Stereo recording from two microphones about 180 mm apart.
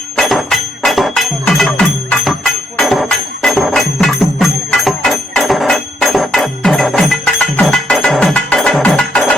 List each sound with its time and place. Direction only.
0.2 s music: centre (ahead or behind)